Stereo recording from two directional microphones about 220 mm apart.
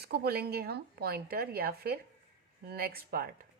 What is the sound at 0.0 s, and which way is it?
A woman's voice, 45° right (ahead or behind).